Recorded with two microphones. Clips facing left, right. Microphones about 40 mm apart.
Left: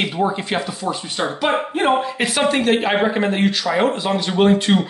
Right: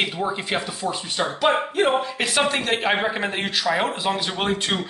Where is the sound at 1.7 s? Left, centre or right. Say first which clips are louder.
Left 3 dB; centre.